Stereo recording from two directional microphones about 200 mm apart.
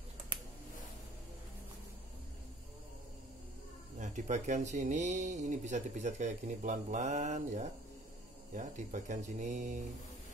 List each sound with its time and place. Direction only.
4.0 s speech: 40° right (ahead or behind)